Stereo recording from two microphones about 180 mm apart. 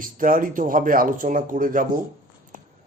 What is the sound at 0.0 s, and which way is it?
Speech, 50° right (ahead or behind).